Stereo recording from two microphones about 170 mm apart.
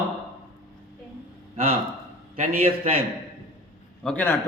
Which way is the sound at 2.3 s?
50° right (ahead or behind).